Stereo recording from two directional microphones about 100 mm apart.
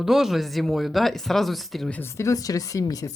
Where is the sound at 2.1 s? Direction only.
30° left (ahead or behind).